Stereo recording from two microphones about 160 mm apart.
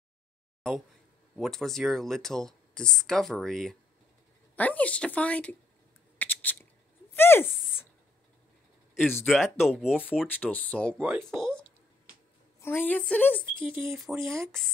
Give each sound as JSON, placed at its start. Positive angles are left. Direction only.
{"t": 1.3, "sound": "a woman's voice", "side_deg": 0}
{"t": 6.1, "sound": "a sound", "side_deg": 10}
{"t": 9.1, "sound": "speech", "side_deg": 0}
{"t": 10.2, "sound": "a woman's voice", "side_deg": 10}
{"t": 11.0, "sound": "speech", "side_deg": -10}
{"t": 11.2, "sound": "speech", "side_deg": 5}
{"t": 12.5, "sound": "a woman's voice", "side_deg": 15}
{"t": 14.2, "sound": "speech", "side_deg": -15}